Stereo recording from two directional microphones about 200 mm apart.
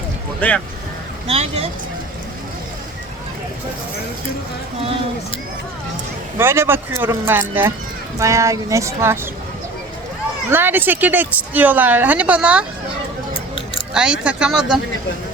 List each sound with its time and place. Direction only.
0.3 s speech: 5° left (ahead or behind)
1.3 s speech: 30° right (ahead or behind)
6.4 s speech: 10° right (ahead or behind)
10.5 s speech: 10° right (ahead or behind)
13.9 s speech: 5° right (ahead or behind)